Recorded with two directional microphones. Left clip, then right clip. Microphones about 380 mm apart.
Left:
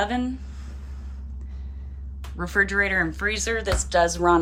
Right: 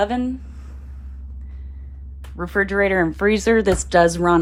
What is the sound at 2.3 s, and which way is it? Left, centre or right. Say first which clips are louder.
Speech: right 2 dB; centre.